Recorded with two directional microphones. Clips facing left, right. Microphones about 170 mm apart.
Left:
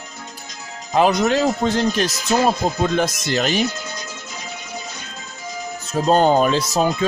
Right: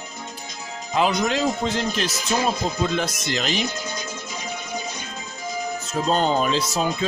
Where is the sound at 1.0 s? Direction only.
50° left (ahead or behind).